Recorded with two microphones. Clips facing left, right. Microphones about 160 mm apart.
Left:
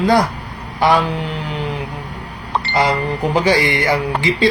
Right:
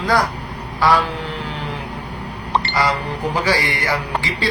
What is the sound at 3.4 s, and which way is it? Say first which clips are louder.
Speech: left 5 dB; 20° left (ahead or behind).